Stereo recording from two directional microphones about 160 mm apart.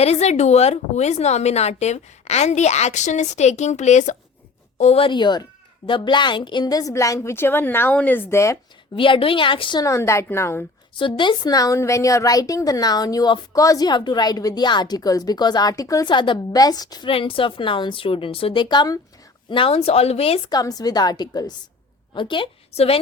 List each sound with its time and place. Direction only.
0.0 s a woman's voice: 40° left (ahead or behind); by 8.5 s 15° left (ahead or behind)
9.0 s a woman's voice: 35° left (ahead or behind); by 10.7 s 15° left (ahead or behind)
10.9 s a woman's voice: 30° left (ahead or behind)
20.5 s a woman's voice: 25° left (ahead or behind); by 23.0 s 40° left (ahead or behind)